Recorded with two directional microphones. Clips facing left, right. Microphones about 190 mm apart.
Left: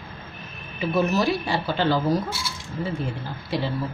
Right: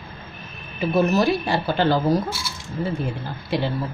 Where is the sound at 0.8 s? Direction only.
50° right (ahead or behind).